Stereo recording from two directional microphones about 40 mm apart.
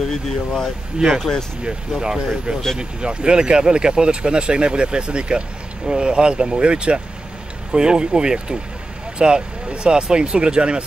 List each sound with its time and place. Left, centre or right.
0.9 s speech: centre